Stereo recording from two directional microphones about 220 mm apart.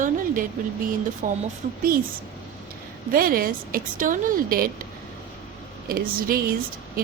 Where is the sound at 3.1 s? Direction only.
40° right (ahead or behind).